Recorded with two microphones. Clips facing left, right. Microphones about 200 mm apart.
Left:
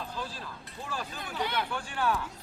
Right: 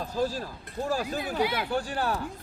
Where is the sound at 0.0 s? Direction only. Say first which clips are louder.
Right 10 dB; 40° right (ahead or behind).